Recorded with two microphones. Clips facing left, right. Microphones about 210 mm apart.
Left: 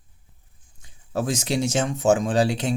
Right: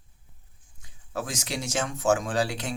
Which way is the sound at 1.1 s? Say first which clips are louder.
Left 8 dB; 25° left (ahead or behind).